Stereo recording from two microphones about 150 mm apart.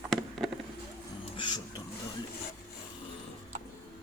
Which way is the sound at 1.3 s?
30° left (ahead or behind).